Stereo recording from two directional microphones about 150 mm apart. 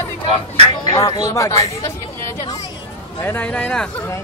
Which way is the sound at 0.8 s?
30° left (ahead or behind).